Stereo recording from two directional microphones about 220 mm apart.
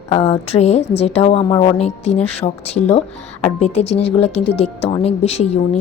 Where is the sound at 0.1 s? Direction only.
30° left (ahead or behind).